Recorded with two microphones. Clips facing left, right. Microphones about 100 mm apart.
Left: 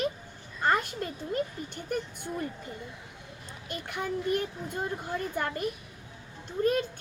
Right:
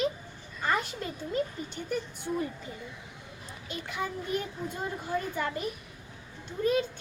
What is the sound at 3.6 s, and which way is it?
Speech, 55° left (ahead or behind).